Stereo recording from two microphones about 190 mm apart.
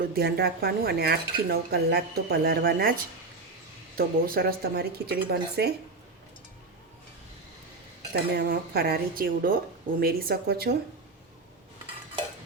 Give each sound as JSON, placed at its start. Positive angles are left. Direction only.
{"t": 0.0, "sound": "speech", "side_deg": -55}
{"t": 8.1, "sound": "speech", "side_deg": -55}